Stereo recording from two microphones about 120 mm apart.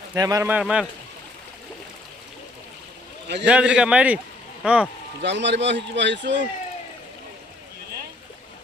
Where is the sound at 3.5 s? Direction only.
10° right (ahead or behind).